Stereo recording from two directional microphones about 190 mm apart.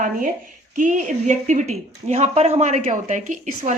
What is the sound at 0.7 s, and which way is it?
Speech, 40° right (ahead or behind).